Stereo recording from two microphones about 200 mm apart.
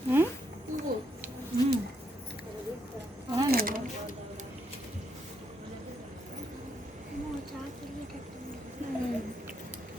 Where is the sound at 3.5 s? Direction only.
45° right (ahead or behind).